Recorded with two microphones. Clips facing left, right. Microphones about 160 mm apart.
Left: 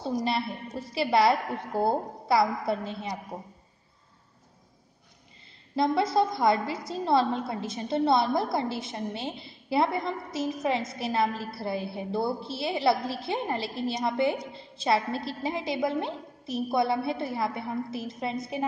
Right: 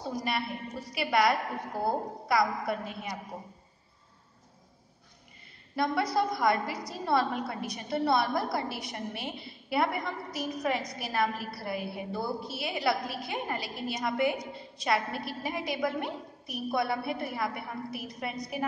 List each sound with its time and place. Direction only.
0.0 s a woman's voice: 25° left (ahead or behind)
5.8 s a woman's voice: 25° left (ahead or behind)